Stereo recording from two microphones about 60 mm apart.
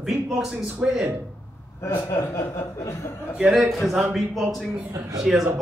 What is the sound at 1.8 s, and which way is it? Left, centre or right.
A man's voice, left.